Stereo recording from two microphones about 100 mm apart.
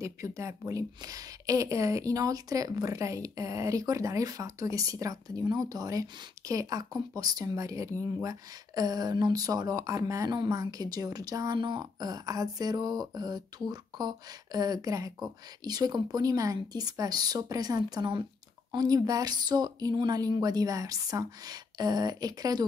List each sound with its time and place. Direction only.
0.0 s speech: 30° right (ahead or behind)